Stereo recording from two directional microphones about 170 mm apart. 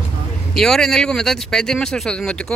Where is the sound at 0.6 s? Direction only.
Centre (ahead or behind).